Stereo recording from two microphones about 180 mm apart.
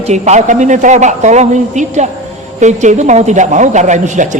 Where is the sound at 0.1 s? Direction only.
40° right (ahead or behind).